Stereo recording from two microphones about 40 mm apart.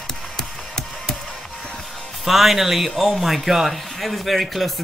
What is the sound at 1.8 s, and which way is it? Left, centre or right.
Music, centre.